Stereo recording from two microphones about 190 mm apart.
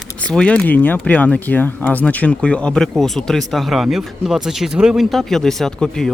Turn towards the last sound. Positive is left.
turn(degrees=5)  # may be behind; listen again after turning